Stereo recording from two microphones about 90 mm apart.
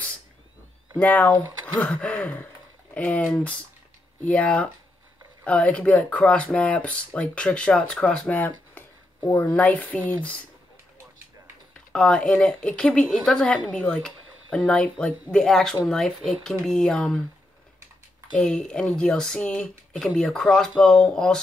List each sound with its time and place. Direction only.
0.9 s speech: 15° left (ahead or behind)
11.9 s speech: 10° left (ahead or behind)
18.4 s speech: 5° left (ahead or behind)